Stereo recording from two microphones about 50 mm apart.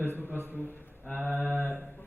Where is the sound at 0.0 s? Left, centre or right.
Right.